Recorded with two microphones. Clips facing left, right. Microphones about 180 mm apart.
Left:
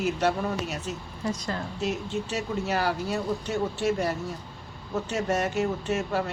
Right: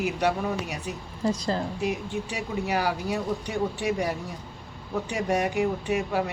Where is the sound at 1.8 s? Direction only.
15° right (ahead or behind).